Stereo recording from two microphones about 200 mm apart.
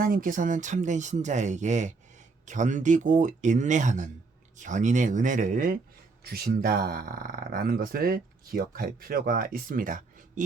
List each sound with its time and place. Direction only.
0.0 s speech: 45° right (ahead or behind)